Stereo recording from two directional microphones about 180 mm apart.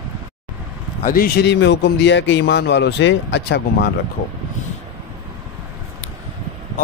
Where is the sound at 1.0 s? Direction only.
55° left (ahead or behind); by 3.9 s 75° left (ahead or behind).